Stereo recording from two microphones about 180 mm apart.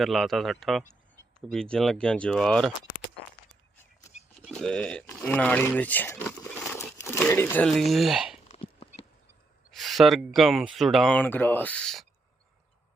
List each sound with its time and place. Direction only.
0.0 s speech: centre (ahead or behind)
4.4 s speech: 5° left (ahead or behind)
8.4 s horse: 35° left (ahead or behind)
9.7 s speech: centre (ahead or behind)